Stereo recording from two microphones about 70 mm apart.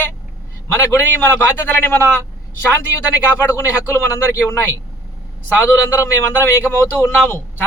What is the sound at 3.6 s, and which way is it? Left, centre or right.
Speech, left.